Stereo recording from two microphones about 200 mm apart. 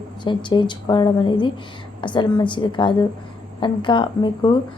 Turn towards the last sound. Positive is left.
turn(degrees=25)  # may be behind; listen again after turning